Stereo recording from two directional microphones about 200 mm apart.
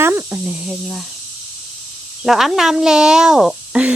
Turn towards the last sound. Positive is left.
turn(degrees=-5)  # may be behind; listen again after turning